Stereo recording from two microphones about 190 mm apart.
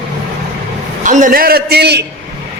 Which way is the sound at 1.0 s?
45° right (ahead or behind).